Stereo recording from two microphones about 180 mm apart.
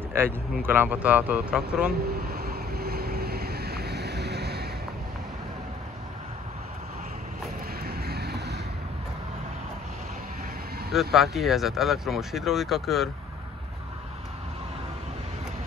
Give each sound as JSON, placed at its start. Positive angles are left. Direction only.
{"t": 0.2, "sound": "speech", "side_deg": -15}
{"t": 2.0, "sound": "vehicle", "side_deg": -55}
{"t": 7.8, "sound": "vehicle", "side_deg": -60}
{"t": 10.9, "sound": "speech", "side_deg": 0}